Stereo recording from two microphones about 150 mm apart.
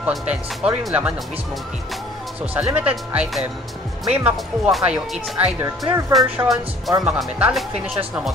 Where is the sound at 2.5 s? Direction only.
10° right (ahead or behind).